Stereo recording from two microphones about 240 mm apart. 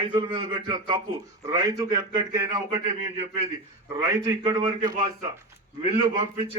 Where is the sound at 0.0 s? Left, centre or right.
Centre.